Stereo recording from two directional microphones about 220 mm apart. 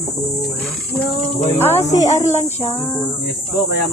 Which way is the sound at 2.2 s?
30° left (ahead or behind).